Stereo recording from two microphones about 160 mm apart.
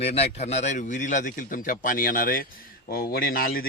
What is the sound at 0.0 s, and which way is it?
A man's voice, 40° left (ahead or behind).